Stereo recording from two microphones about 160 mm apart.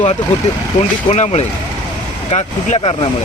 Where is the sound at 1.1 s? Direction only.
40° left (ahead or behind).